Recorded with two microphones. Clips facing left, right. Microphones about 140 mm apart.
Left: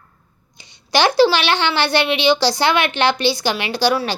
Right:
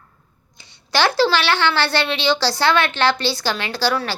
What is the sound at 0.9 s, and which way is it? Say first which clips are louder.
A child's voice: left 3 dB; 15° left (ahead or behind).